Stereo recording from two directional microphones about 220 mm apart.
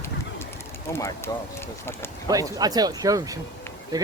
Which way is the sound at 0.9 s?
15° left (ahead or behind).